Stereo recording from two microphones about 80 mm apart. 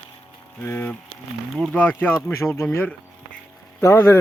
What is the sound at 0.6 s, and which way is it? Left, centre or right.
Speech, left.